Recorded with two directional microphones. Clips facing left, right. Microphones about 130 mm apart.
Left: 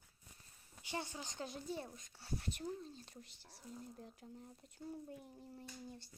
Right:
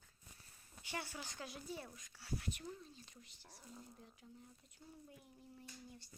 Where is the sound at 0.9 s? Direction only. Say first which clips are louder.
Left 2 dB; 20° left (ahead or behind).